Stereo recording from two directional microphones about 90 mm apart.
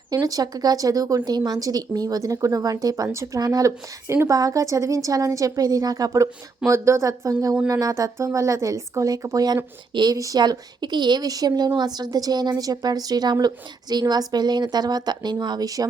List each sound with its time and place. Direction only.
0.1 s speech: 40° right (ahead or behind)
6.7 s speech: 30° right (ahead or behind)
9.9 s a woman's voice: 55° right (ahead or behind)
10.2 s a woman's voice: 40° right (ahead or behind)